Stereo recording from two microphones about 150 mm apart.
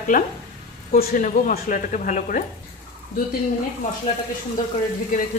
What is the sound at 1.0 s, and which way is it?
A woman's voice, 75° left (ahead or behind).